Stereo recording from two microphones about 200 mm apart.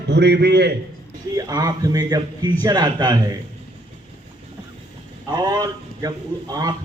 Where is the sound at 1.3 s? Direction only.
20° right (ahead or behind).